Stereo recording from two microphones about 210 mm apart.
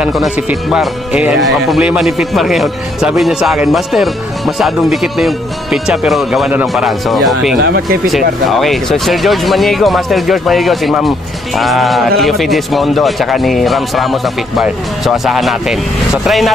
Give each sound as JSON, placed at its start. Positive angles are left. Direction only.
{"t": 0.0, "sound": "speech", "side_deg": 0}
{"t": 7.6, "sound": "speech", "side_deg": -50}
{"t": 8.5, "sound": "speech", "side_deg": 0}